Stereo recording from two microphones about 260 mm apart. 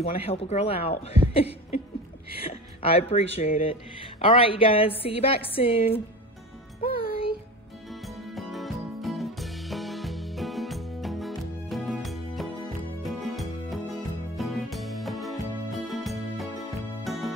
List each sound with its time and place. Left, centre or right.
0.0 s speech: left
8.4 s music: centre